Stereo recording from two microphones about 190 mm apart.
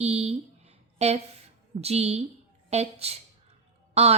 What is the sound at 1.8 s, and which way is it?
A woman's voice, 35° right (ahead or behind).